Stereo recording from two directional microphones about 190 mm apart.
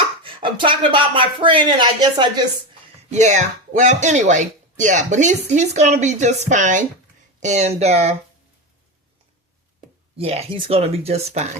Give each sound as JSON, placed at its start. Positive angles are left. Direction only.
{"t": 0.2, "sound": "speech", "side_deg": -25}
{"t": 3.1, "sound": "speech", "side_deg": -40}
{"t": 10.2, "sound": "speech", "side_deg": -30}